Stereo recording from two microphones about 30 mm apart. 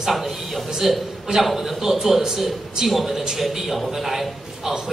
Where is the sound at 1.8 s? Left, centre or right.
Centre.